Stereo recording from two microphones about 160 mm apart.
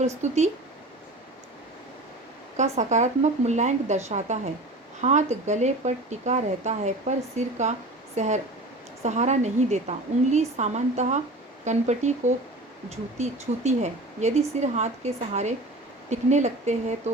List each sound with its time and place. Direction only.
0.2 s speech: 45° right (ahead or behind)
2.6 s speech: 50° right (ahead or behind)